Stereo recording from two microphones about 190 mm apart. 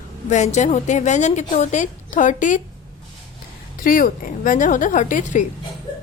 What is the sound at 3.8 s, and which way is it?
A woman's voice, 45° left (ahead or behind).